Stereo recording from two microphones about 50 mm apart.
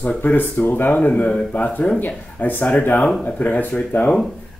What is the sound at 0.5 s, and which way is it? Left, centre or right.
Speech, left.